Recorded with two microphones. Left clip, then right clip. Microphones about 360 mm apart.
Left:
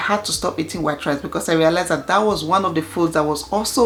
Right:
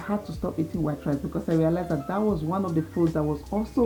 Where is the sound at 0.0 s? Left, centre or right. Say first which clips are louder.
Left 12 dB; centre.